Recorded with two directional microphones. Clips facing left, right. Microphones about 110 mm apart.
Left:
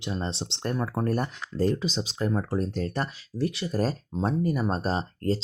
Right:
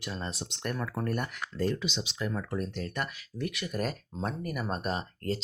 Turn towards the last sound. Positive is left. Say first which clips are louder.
# left 6 dB
turn(degrees=35)  # may be behind; listen again after turning